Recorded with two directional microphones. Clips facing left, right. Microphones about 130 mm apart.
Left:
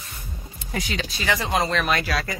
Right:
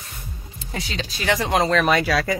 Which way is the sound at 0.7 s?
30° right (ahead or behind).